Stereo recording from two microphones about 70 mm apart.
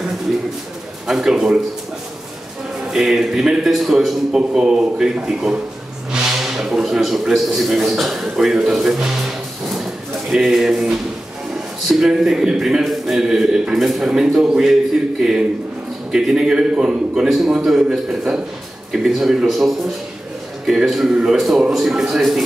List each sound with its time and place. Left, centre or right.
1.0 s a man's voice: centre
2.9 s a man's voice: centre